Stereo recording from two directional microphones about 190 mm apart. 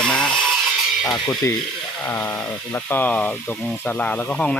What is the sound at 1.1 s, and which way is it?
Speech, 20° left (ahead or behind).